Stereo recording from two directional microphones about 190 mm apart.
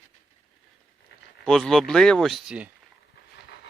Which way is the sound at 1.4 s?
5° left (ahead or behind).